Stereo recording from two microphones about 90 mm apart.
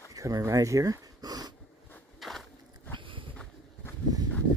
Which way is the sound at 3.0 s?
70° right (ahead or behind).